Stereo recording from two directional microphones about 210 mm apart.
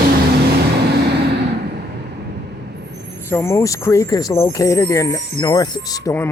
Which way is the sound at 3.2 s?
10° left (ahead or behind).